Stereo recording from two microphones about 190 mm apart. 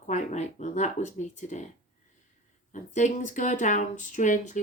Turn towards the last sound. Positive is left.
turn(degrees=40)  # may be behind; listen again after turning